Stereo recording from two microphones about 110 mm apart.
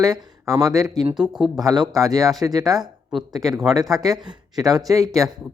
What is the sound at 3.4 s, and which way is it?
Speech, centre (ahead or behind).